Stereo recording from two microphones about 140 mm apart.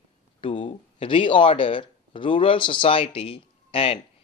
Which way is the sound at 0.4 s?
40° left (ahead or behind).